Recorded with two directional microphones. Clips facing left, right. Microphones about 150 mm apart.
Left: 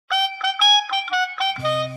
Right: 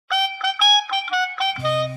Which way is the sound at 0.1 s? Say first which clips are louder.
Even; centre (ahead or behind).